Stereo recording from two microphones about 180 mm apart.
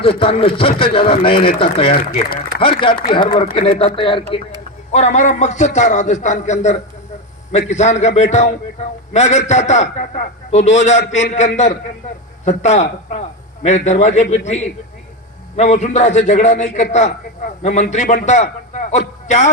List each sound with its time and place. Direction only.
0.0 s a man's voice: 30° left (ahead or behind)
4.9 s a man's voice: 40° left (ahead or behind)